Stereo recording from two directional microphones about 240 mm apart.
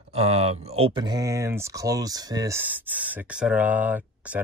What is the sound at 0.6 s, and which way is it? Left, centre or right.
Speech, right.